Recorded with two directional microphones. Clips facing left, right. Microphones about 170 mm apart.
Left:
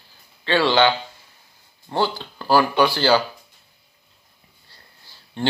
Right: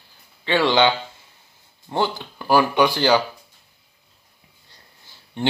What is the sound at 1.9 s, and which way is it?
Speech, 15° right (ahead or behind).